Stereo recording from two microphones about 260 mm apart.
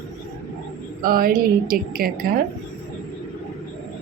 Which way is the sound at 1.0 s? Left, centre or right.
Right.